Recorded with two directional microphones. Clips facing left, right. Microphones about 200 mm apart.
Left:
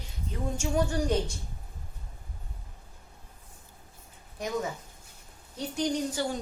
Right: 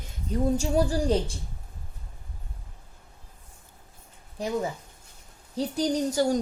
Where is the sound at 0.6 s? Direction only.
35° right (ahead or behind).